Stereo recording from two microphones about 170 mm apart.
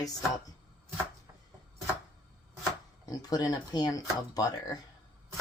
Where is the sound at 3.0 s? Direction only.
20° left (ahead or behind).